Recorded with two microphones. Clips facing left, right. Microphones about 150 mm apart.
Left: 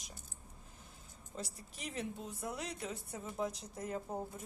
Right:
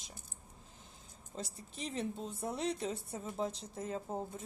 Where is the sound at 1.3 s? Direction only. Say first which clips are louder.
Right 2 dB; 30° right (ahead or behind).